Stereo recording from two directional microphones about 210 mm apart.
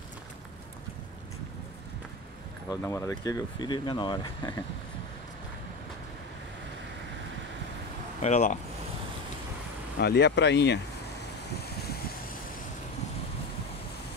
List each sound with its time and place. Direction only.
2.7 s speech: 15° left (ahead or behind)
8.2 s speech: 35° left (ahead or behind)
9.9 s speech: 50° left (ahead or behind)
11.4 s boat: 50° left (ahead or behind)